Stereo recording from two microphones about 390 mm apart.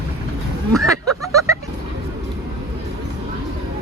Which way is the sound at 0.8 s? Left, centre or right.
Centre.